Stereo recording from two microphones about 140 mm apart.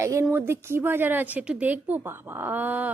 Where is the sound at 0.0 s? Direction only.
20° right (ahead or behind).